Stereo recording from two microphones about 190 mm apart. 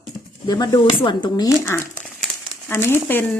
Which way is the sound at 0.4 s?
20° left (ahead or behind).